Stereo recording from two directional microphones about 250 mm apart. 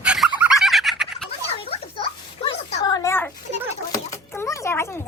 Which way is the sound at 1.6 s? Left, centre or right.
Left.